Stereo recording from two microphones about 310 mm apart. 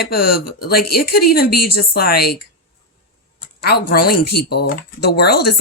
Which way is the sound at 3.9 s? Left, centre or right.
Left.